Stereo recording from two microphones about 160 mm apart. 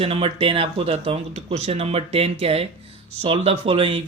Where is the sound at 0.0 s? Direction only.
35° right (ahead or behind).